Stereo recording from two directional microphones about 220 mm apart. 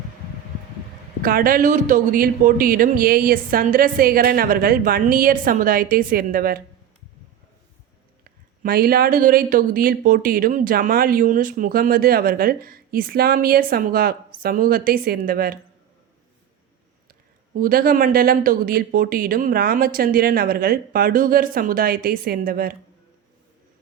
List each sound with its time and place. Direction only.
1.2 s speech: 40° right (ahead or behind)
8.2 s speech: 45° right (ahead or behind)
17.1 s speech: 40° right (ahead or behind)